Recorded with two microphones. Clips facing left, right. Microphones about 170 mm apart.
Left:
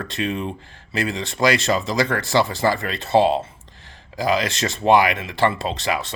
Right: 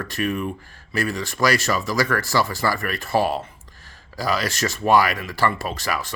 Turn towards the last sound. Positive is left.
turn(degrees=20)  # may be behind; listen again after turning